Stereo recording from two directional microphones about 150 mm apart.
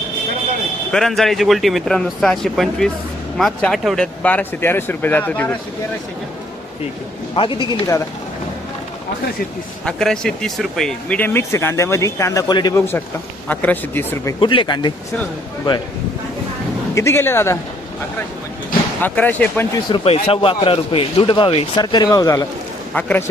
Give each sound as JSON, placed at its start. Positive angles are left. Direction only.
{"t": 0.9, "sound": "speech", "side_deg": 0}
{"t": 7.3, "sound": "speech", "side_deg": 35}
{"t": 9.8, "sound": "speech", "side_deg": 5}
{"t": 13.5, "sound": "speech", "side_deg": 10}
{"t": 14.3, "sound": "speech", "side_deg": 35}
{"t": 16.9, "sound": "speech", "side_deg": 20}
{"t": 19.0, "sound": "speech", "side_deg": 10}
{"t": 19.9, "sound": "speech", "side_deg": 40}
{"t": 23.0, "sound": "speech", "side_deg": 10}